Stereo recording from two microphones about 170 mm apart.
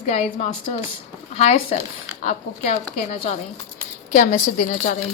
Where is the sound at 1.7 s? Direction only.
45° left (ahead or behind).